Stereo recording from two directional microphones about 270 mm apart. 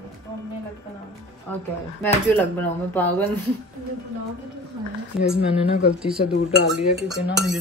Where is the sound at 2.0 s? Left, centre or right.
Centre.